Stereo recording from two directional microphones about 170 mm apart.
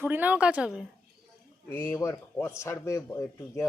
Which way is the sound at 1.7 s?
10° left (ahead or behind).